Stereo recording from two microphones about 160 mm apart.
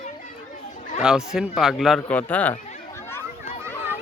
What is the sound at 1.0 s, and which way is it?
Speech, 5° right (ahead or behind).